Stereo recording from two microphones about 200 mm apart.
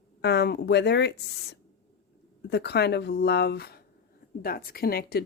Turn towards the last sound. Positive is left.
turn(degrees=50)  # may be behind; listen again after turning